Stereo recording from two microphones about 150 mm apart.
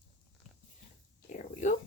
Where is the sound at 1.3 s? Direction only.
55° left (ahead or behind).